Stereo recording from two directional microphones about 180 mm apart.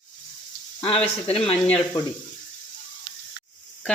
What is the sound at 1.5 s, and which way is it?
Speech, 5° left (ahead or behind).